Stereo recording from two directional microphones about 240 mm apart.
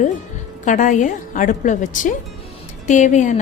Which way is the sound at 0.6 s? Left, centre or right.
Left.